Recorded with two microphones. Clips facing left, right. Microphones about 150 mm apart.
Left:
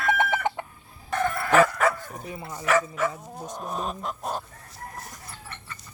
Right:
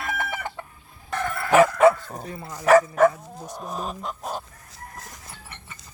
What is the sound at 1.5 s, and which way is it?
Chicken, 15° right (ahead or behind).